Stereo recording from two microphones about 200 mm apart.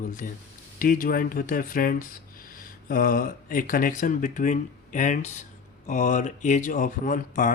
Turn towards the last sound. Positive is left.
turn(degrees=40)  # may be behind; listen again after turning